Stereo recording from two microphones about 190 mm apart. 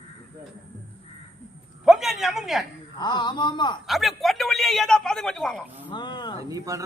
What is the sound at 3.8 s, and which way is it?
A man's voice, centre (ahead or behind).